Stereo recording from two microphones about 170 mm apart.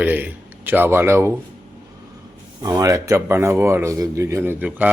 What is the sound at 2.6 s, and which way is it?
Speech, 20° right (ahead or behind).